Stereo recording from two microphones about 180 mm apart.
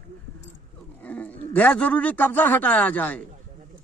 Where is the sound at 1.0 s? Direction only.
10° left (ahead or behind).